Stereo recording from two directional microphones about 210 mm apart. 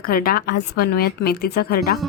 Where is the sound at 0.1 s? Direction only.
45° left (ahead or behind).